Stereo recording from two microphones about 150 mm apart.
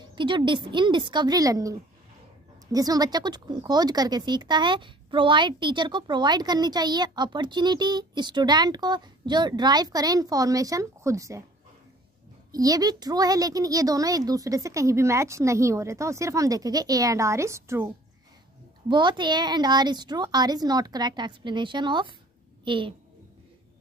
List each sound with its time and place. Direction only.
0.1 s a woman's voice: 30° right (ahead or behind)
12.5 s speech: 25° right (ahead or behind)
18.9 s a woman's voice: 30° right (ahead or behind)